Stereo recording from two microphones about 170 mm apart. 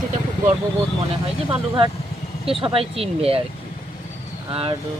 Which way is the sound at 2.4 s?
35° right (ahead or behind).